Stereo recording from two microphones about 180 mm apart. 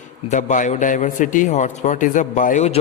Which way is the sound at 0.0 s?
40° left (ahead or behind).